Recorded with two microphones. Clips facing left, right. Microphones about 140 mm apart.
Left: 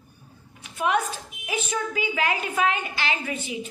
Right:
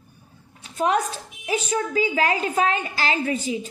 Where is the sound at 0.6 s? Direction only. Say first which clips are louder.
Right 3 dB; 35° right (ahead or behind).